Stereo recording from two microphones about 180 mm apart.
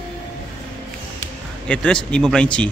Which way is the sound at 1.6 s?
5° left (ahead or behind).